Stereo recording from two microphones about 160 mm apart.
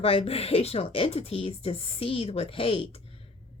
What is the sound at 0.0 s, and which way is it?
Speech, 35° left (ahead or behind).